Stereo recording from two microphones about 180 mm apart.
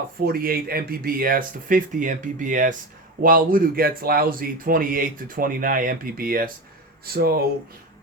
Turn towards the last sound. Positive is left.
turn(degrees=-60)  # may be behind; listen again after turning